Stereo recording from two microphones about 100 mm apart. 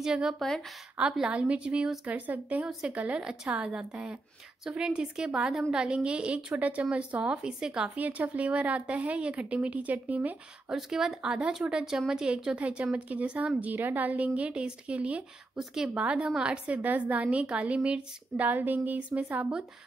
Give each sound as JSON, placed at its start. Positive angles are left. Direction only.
{"t": 0.0, "sound": "a woman's voice", "side_deg": -5}
{"t": 10.7, "sound": "a woman's voice", "side_deg": -5}